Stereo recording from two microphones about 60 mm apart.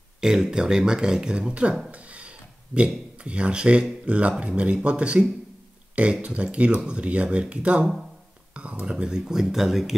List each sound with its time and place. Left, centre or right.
0.2 s speech: centre
6.2 s speech: centre
8.8 s speech: centre